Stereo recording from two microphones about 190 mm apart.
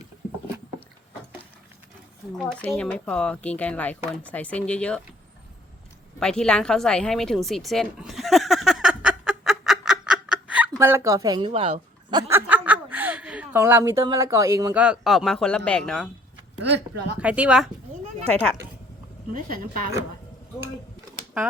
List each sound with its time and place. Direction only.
2.4 s speech: centre (ahead or behind)
6.1 s a sound: 5° left (ahead or behind); by 12.2 s 30° right (ahead or behind)
12.3 s chuckle: 10° right (ahead or behind)
14.0 s speech: 20° right (ahead or behind); by 16.0 s 5° left (ahead or behind)
16.6 s speech: 65° right (ahead or behind)
17.2 s speech: 5° right (ahead or behind)
18.3 s speech: 5° left (ahead or behind)
19.3 s a woman's voice: 50° right (ahead or behind)